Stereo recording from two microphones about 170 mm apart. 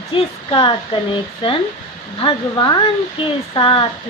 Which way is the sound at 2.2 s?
25° left (ahead or behind).